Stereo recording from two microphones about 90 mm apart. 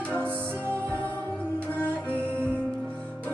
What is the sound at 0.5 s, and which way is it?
Music, 25° right (ahead or behind).